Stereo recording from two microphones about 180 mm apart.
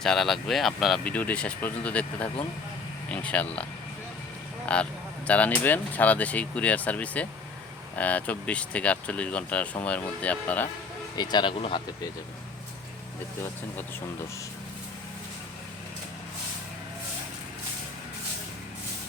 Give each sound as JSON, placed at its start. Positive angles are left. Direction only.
{"t": 0.0, "sound": "speech", "side_deg": 0}
{"t": 11.2, "sound": "speech", "side_deg": 25}